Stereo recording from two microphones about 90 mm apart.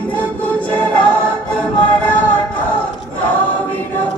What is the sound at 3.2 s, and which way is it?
Choir, 20° left (ahead or behind).